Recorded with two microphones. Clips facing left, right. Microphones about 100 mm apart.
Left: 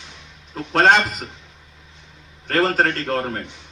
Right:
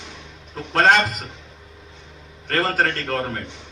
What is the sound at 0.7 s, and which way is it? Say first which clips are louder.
Speech: left 1 dB; 20° left (ahead or behind).